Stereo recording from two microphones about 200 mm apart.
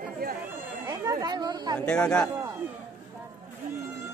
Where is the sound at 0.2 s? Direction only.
50° right (ahead or behind).